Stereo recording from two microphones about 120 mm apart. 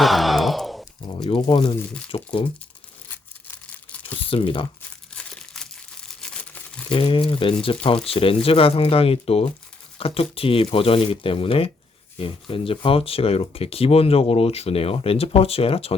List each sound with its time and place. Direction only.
0.0 s sigh: centre (ahead or behind)
1.0 s speech: 40° left (ahead or behind)
4.3 s speech: 50° left (ahead or behind)
5.1 s crumpling: 5° left (ahead or behind)
6.2 s tearing: 10° left (ahead or behind)
6.9 s speech: 45° left (ahead or behind)